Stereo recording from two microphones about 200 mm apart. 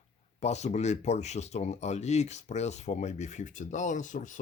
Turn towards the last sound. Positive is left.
turn(degrees=40)  # may be behind; listen again after turning